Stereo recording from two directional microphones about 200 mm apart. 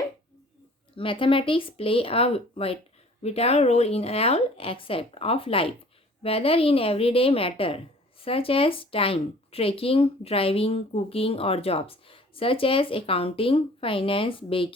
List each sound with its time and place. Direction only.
0.9 s speech: 25° left (ahead or behind)